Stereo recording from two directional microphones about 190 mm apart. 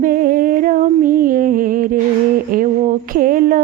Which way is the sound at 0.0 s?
45° right (ahead or behind).